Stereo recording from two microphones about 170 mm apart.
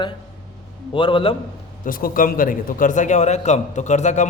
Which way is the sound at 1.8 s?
55° left (ahead or behind).